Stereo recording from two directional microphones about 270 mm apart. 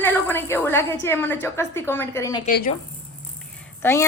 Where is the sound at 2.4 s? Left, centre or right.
Left.